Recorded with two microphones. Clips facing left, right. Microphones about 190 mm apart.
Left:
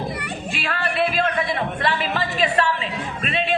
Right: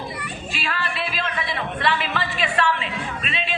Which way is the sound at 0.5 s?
55° left (ahead or behind).